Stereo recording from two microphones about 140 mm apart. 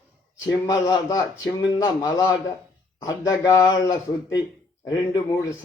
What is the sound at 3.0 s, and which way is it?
Speech, 20° left (ahead or behind).